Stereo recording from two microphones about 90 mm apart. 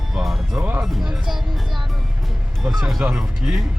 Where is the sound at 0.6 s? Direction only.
20° right (ahead or behind).